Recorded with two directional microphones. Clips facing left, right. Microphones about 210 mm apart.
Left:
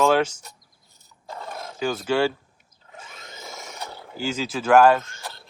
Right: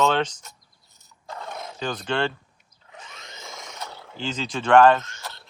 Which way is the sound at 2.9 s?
5° left (ahead or behind).